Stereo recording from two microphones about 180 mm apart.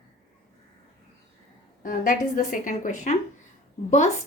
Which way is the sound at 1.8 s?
50° left (ahead or behind).